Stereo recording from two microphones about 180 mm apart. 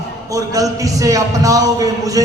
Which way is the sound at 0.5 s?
20° right (ahead or behind).